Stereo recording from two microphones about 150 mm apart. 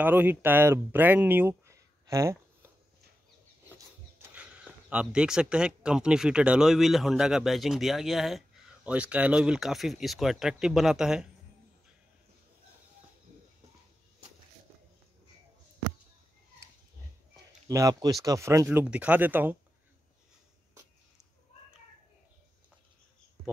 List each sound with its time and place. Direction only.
0.0 s speech: 10° right (ahead or behind)
3.7 s speech: 15° right (ahead or behind)
17.6 s speech: 25° right (ahead or behind)